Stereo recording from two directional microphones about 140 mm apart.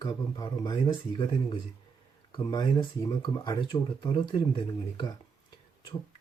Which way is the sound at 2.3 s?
30° left (ahead or behind).